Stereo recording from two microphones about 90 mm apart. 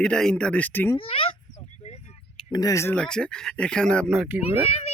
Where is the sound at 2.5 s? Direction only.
45° left (ahead or behind).